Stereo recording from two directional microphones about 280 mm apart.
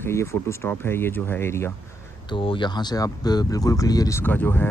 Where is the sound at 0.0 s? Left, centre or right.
Centre.